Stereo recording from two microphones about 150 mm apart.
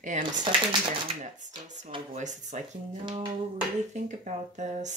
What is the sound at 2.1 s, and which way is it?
Speech, 55° right (ahead or behind).